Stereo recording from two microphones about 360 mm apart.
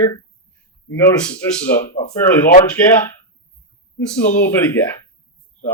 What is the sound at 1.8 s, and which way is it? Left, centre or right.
Speech, left.